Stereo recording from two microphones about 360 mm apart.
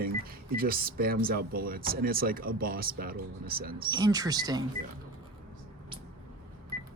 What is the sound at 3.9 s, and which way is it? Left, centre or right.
Speech, centre.